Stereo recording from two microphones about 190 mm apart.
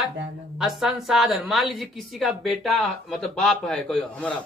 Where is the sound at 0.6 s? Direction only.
5° right (ahead or behind).